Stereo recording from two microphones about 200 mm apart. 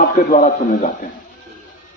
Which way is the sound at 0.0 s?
45° left (ahead or behind).